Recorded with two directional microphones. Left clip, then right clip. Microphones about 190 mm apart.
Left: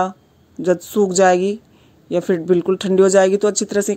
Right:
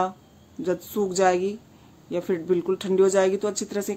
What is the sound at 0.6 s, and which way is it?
Speech, 35° left (ahead or behind).